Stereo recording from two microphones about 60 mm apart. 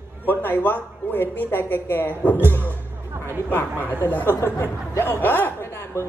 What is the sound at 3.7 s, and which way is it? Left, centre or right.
Speech, right.